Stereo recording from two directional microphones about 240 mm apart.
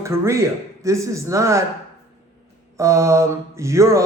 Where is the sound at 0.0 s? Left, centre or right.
Centre.